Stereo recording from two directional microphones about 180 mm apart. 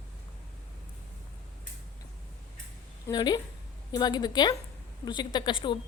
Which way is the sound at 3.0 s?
25° left (ahead or behind).